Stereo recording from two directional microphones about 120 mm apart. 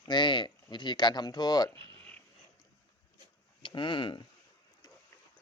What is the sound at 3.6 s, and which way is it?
Speech, 40° left (ahead or behind).